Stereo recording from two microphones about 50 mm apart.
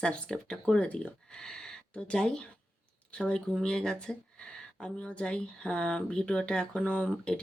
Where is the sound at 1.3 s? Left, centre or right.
Centre.